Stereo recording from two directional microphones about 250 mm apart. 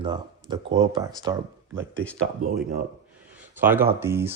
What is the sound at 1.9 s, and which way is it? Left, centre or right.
Speech, centre.